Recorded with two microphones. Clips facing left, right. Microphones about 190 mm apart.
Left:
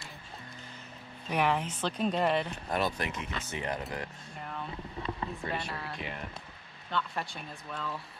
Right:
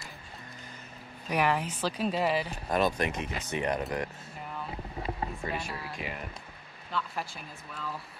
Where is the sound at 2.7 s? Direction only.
20° right (ahead or behind).